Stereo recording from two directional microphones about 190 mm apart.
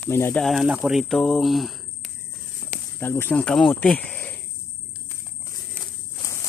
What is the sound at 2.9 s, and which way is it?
Speech, 10° left (ahead or behind).